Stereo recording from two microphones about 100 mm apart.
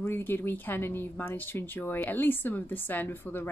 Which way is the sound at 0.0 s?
20° left (ahead or behind).